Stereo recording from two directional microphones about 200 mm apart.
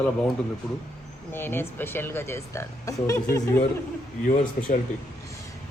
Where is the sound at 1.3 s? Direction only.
10° left (ahead or behind).